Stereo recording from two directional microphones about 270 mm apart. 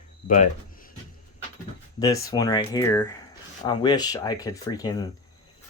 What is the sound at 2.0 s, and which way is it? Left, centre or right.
Speech, centre.